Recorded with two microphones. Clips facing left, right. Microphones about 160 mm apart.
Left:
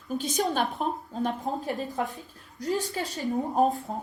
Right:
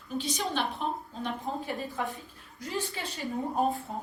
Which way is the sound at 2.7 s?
40° left (ahead or behind).